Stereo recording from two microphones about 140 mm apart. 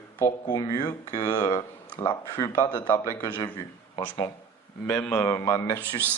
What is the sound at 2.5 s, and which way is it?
A man's voice, 15° left (ahead or behind).